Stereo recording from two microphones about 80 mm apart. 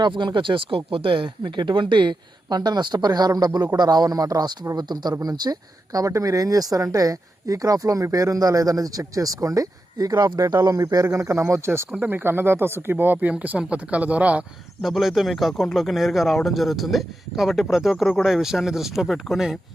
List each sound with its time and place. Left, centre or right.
0.0 s speech: right; by 14.4 s centre
14.8 s speech: centre